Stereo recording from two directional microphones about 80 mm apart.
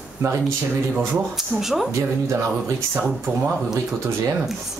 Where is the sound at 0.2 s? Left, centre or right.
Right.